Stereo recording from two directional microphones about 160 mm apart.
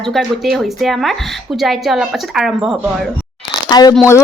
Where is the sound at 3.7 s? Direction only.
25° left (ahead or behind).